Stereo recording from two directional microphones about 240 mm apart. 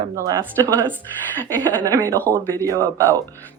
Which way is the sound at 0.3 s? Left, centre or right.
Centre.